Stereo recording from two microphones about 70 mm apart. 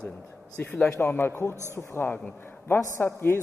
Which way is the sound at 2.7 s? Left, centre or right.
Left.